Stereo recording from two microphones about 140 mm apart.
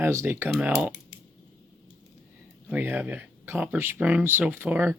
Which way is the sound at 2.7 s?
10° right (ahead or behind).